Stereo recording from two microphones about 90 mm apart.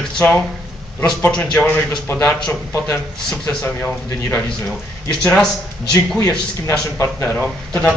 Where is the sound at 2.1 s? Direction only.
25° left (ahead or behind).